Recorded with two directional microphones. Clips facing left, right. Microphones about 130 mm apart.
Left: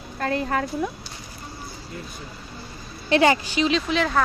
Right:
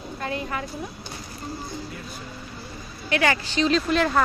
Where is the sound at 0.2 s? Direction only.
50° left (ahead or behind).